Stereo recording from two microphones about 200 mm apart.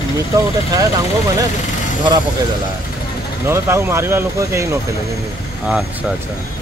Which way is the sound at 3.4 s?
15° right (ahead or behind).